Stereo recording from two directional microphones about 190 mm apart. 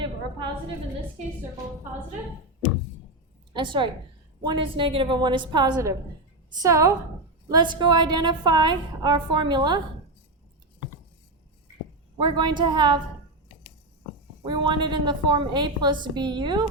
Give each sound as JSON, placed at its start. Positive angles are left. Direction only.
{"t": 0.0, "sound": "a sound", "side_deg": -25}
{"t": 3.5, "sound": "a woman's voice", "side_deg": -25}
{"t": 12.2, "sound": "a woman's voice", "side_deg": -25}
{"t": 14.4, "sound": "a woman's voice", "side_deg": -25}